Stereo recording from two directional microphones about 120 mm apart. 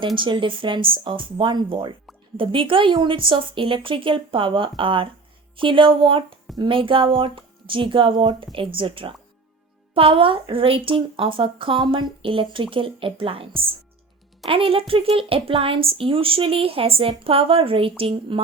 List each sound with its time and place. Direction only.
0.2 s a woman's voice: 45° right (ahead or behind)